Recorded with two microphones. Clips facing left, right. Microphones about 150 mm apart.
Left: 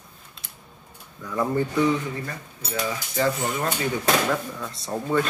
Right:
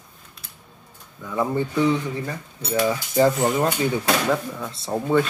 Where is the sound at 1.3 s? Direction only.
15° right (ahead or behind).